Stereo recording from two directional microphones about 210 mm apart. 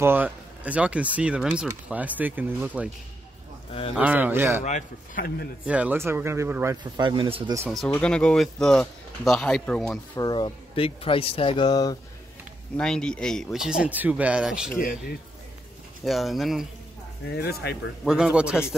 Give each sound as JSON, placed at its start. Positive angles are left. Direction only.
{"t": 0.0, "sound": "speech", "side_deg": -10}
{"t": 3.9, "sound": "speech", "side_deg": -5}
{"t": 4.6, "sound": "speech", "side_deg": 40}
{"t": 5.7, "sound": "speech", "side_deg": -5}
{"t": 7.7, "sound": "speech", "side_deg": 5}
{"t": 10.1, "sound": "speech", "side_deg": 20}
{"t": 12.7, "sound": "speech", "side_deg": 5}
{"t": 14.8, "sound": "speech", "side_deg": 40}
{"t": 16.0, "sound": "speech", "side_deg": 0}
{"t": 17.3, "sound": "speech", "side_deg": 50}
{"t": 18.0, "sound": "speech", "side_deg": -5}